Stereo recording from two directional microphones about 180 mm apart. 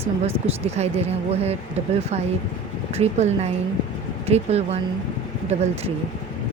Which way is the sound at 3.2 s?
35° right (ahead or behind).